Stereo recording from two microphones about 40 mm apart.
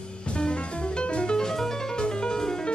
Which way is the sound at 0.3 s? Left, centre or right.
Left.